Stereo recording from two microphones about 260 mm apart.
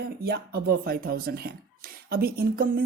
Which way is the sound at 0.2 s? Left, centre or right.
Right.